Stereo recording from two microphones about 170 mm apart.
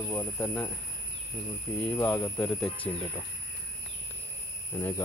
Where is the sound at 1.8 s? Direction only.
10° left (ahead or behind).